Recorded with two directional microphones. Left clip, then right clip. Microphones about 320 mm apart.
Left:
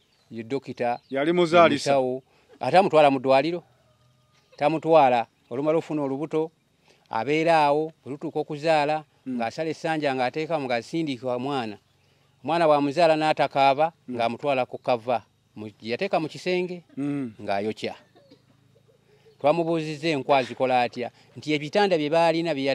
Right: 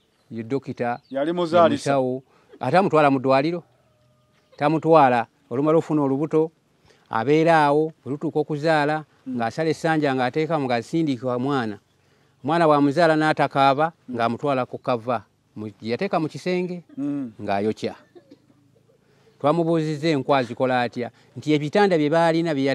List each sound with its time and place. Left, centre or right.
0.3 s speech: centre
1.1 s speech: left
1.9 s speech: centre
16.9 s speech: left
17.4 s speech: centre
19.4 s speech: centre